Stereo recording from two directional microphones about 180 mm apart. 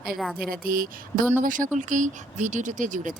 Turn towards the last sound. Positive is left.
turn(degrees=-45)  # may be behind; listen again after turning